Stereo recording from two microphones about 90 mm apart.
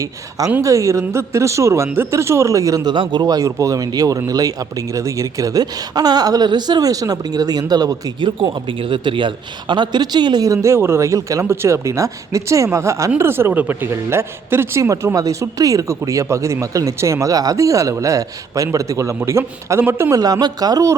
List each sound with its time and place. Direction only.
0.0 s speech: 40° right (ahead or behind)
2.9 s speech: 60° right (ahead or behind); by 8.1 s 45° right (ahead or behind)
8.2 s a man's voice: 70° right (ahead or behind); by 10.5 s 55° right (ahead or behind)
10.5 s a man's voice: 35° right (ahead or behind)
20.1 s speech: 45° right (ahead or behind)